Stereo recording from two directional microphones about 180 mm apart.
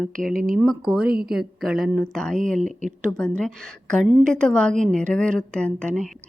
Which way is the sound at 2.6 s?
40° right (ahead or behind).